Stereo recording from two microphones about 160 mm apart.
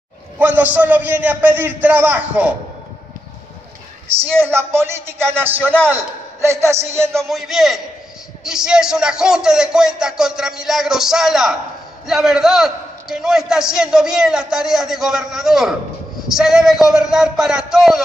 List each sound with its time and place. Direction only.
0.4 s a man's voice: 10° right (ahead or behind)
4.5 s a man's voice: 15° right (ahead or behind)
7.2 s a man's voice: centre (ahead or behind)